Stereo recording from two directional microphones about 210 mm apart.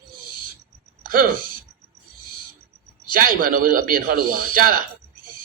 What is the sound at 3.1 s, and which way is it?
A man's voice, 40° right (ahead or behind).